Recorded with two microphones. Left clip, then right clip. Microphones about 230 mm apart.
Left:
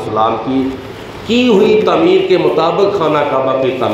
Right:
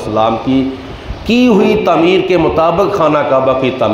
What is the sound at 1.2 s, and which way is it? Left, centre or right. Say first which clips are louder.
A man's voice: even; right.